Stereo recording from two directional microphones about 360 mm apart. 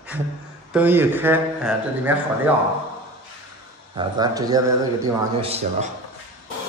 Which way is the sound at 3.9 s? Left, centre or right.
Centre.